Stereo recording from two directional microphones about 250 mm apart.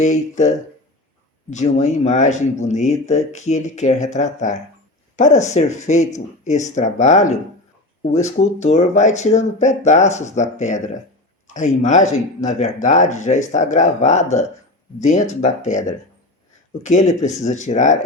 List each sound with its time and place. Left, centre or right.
0.0 s speech: left